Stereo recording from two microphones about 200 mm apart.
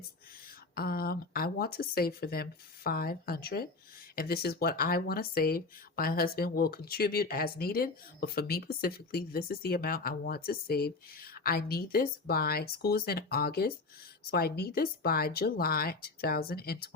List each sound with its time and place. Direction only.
0.8 s speech: 50° left (ahead or behind)